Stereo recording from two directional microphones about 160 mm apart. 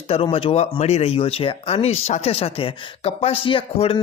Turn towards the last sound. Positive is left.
turn(degrees=35)  # may be behind; listen again after turning